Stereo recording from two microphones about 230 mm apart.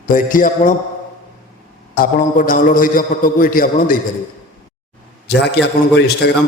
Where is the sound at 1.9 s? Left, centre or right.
Left.